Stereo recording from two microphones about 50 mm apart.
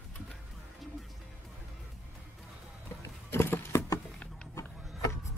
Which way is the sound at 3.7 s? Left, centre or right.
Left.